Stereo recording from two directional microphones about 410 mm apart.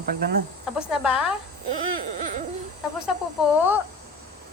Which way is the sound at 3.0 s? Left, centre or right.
Centre.